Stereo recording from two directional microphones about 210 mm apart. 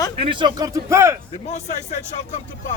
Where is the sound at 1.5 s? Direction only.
35° left (ahead or behind).